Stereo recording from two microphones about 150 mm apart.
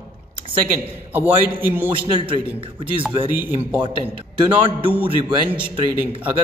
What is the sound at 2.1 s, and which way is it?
Speech, 35° right (ahead or behind).